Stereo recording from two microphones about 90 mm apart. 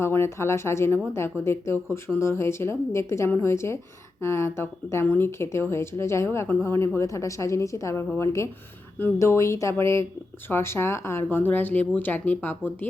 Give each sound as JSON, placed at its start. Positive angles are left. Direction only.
{"t": 0.0, "sound": "a woman's voice", "side_deg": 30}